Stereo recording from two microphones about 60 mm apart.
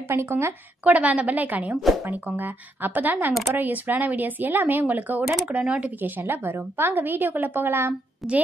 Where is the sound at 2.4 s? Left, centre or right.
Right.